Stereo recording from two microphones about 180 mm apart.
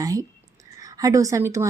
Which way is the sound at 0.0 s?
20° right (ahead or behind).